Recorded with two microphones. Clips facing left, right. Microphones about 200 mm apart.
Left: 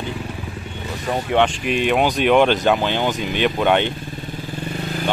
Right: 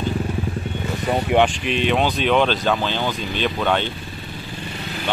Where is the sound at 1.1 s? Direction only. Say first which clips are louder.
Right 1 dB; 10° right (ahead or behind).